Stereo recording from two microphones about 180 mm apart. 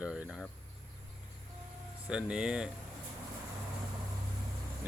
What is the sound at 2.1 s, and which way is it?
Speech, 5° right (ahead or behind).